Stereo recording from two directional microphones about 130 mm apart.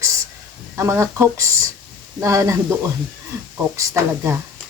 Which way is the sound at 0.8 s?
20° right (ahead or behind).